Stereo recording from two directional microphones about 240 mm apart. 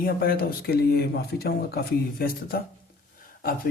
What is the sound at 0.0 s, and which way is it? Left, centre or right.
Speech, left.